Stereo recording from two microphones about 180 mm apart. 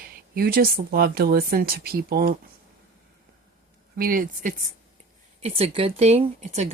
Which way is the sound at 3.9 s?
50° right (ahead or behind).